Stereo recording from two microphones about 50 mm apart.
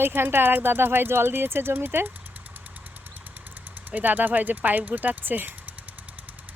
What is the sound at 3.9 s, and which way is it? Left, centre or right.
Speech, right.